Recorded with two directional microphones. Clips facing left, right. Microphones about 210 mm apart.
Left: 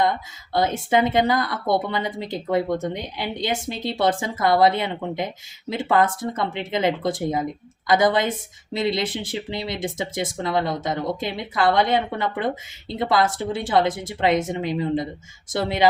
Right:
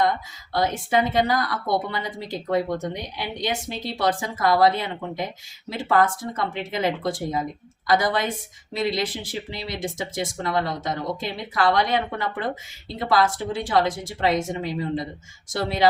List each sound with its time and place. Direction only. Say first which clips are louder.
0.5 s speech: left 2 dB; 25° left (ahead or behind)